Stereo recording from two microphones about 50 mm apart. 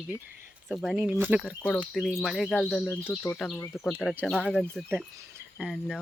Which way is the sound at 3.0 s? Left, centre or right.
Left.